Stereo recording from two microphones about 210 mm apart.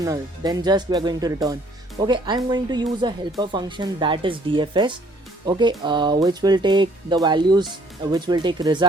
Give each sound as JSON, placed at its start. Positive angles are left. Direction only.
{"t": 0.0, "sound": "speech", "side_deg": -15}